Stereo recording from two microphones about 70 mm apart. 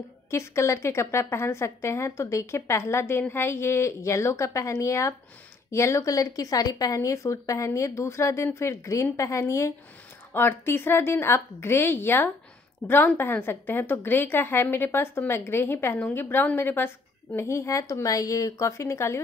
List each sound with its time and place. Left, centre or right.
0.3 s a woman's voice: left
10.3 s a woman's voice: left